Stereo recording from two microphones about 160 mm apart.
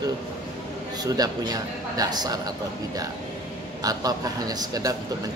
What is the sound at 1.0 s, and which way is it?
A man's voice, 25° right (ahead or behind).